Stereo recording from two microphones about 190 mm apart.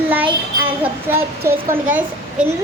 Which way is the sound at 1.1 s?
10° right (ahead or behind).